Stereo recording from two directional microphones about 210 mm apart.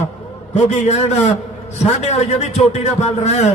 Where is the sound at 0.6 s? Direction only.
30° left (ahead or behind).